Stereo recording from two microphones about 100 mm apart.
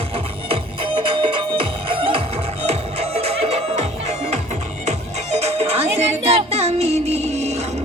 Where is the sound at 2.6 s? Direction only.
90° right.